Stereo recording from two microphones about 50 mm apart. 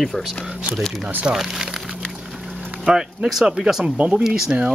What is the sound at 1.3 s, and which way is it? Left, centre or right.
Speech, centre.